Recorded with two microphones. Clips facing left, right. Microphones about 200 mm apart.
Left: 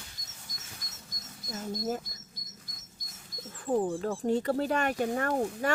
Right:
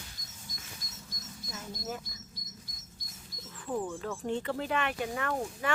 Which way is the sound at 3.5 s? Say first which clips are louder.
Left 6 dB; 40° left (ahead or behind).